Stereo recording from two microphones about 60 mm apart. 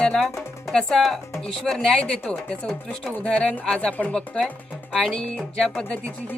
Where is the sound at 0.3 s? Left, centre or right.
Centre.